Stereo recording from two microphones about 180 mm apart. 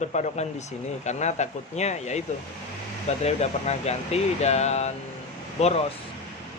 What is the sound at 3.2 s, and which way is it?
Speech, 35° left (ahead or behind).